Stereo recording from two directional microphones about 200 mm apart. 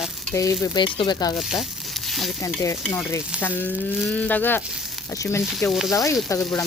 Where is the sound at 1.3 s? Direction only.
Centre (ahead or behind).